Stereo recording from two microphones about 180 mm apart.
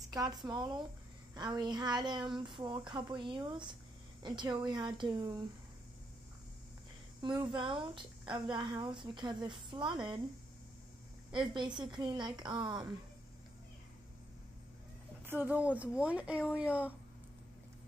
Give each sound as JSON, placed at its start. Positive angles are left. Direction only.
{"t": 0.1, "sound": "speech", "side_deg": -20}
{"t": 7.2, "sound": "speech", "side_deg": -25}
{"t": 11.3, "sound": "speech", "side_deg": -25}
{"t": 15.2, "sound": "speech", "side_deg": -10}